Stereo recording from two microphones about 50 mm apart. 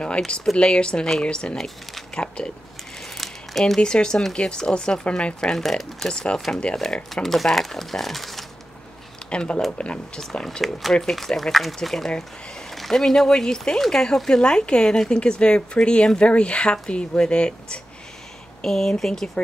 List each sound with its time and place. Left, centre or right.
0.6 s speech: centre
3.2 s a sound: centre
3.8 s speech: centre
5.6 s speech: centre
6.0 s speech: centre
6.3 s speech: centre
9.3 s speech: left
10.4 s speech: centre